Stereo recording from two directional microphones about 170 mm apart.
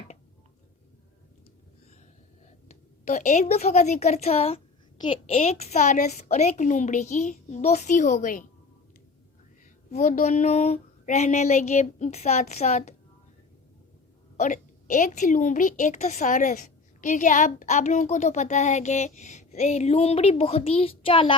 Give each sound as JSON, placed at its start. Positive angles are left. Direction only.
{"t": 2.6, "sound": "a woman's voice", "side_deg": 45}
{"t": 9.9, "sound": "a woman's voice", "side_deg": 45}
{"t": 14.3, "sound": "a woman's voice", "side_deg": 45}